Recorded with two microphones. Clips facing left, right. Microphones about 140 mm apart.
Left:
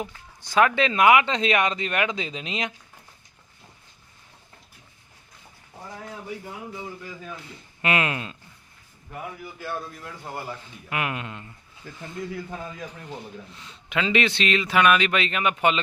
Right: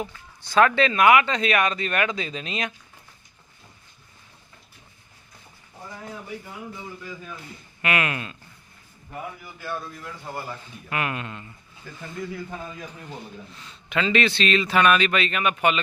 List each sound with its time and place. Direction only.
0.0 s speech: 15° left (ahead or behind)
7.8 s speech: 25° left (ahead or behind)
9.6 s a man's voice: 20° left (ahead or behind)